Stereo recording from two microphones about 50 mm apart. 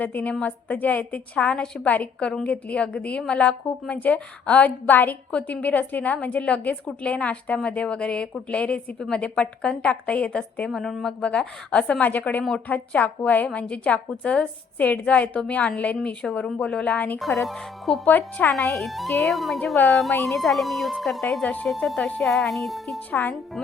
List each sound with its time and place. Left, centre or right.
0.0 s a woman's voice: left
2.1 s a woman's voice: centre
9.0 s a woman's voice: centre
16.2 s a woman's voice: centre
16.6 s a woman's voice: left
17.2 s speech: centre
18.0 s a woman's voice: left
18.9 s speech: centre
21.4 s a woman's voice: left
22.2 s speech: centre